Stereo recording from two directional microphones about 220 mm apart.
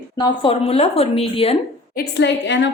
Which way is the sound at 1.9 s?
50° left (ahead or behind).